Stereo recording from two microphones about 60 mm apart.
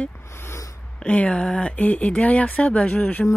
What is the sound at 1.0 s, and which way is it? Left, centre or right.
A woman's voice, centre.